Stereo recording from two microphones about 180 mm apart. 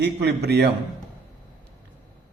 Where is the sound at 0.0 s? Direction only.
70° right (ahead or behind).